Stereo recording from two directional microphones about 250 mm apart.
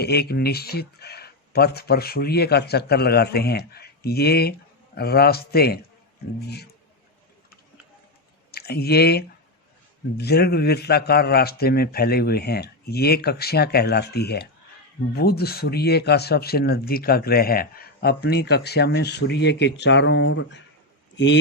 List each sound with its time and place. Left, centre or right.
0.0 s speech: left
8.5 s speech: left